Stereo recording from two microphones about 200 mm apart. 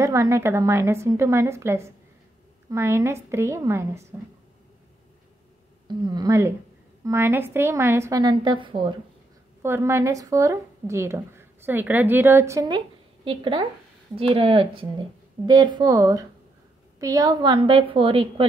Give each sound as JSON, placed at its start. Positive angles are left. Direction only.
{"t": 0.0, "sound": "a woman's voice", "side_deg": -15}
{"t": 5.9, "sound": "a woman's voice", "side_deg": -20}
{"t": 9.6, "sound": "a woman's voice", "side_deg": -10}